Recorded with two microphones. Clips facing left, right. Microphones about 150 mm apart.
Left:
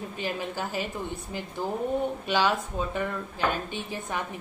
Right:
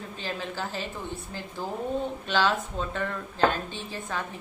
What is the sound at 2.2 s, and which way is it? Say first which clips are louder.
Speech: right 2 dB; 10° left (ahead or behind).